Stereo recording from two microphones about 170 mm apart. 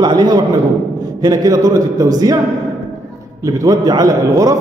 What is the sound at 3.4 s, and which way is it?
A man's voice, 20° right (ahead or behind).